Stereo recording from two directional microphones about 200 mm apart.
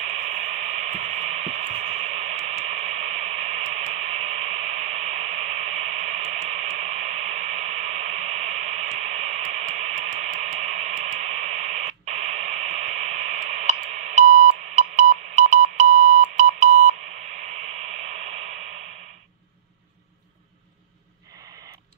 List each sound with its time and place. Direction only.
0.0 s radio: 35° right (ahead or behind)